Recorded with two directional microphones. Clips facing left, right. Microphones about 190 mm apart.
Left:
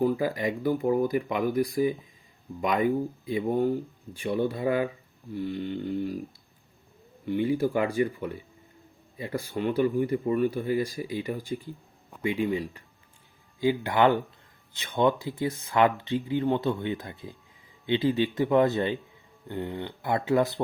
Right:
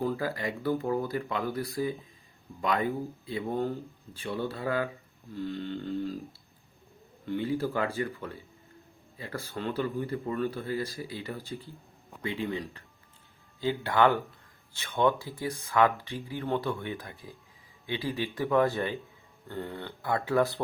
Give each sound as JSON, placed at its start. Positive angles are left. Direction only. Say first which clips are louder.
{"t": 0.0, "sound": "speech", "louder": "left 5 dB", "side_deg": 15}
{"t": 7.3, "sound": "speech", "louder": "left 5 dB", "side_deg": 15}